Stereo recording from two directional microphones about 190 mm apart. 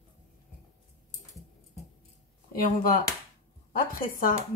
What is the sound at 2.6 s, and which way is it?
Speech, 45° left (ahead or behind).